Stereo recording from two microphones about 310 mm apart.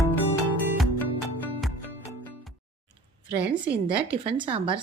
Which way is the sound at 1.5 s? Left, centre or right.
Centre.